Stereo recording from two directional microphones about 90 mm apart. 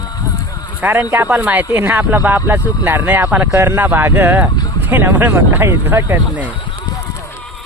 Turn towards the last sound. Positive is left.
turn(degrees=-20)  # may be behind; listen again after turning